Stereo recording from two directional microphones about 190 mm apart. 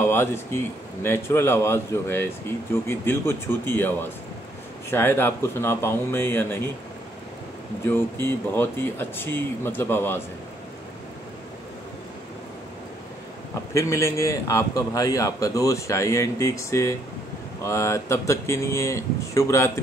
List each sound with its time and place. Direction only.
0.0 s a man's voice: 15° left (ahead or behind)
7.9 s a man's voice: 10° left (ahead or behind)
13.7 s a man's voice: 15° left (ahead or behind)